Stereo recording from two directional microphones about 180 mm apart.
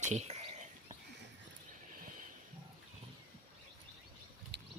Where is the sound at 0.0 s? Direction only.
40° right (ahead or behind).